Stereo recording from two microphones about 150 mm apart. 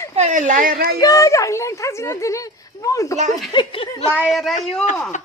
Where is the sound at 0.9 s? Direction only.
25° left (ahead or behind).